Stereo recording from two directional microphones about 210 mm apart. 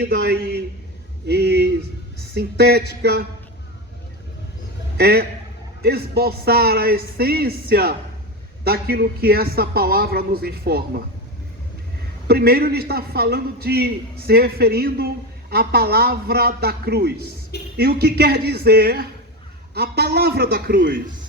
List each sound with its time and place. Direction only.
0.0 s a man's voice: 50° right (ahead or behind)
4.9 s a man's voice: 50° right (ahead or behind)
12.3 s a man's voice: 45° right (ahead or behind)